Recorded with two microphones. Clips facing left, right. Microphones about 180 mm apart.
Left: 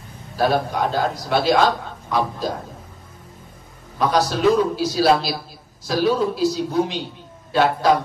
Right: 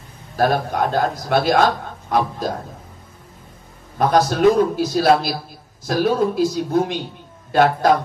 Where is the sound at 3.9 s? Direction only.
50° right (ahead or behind).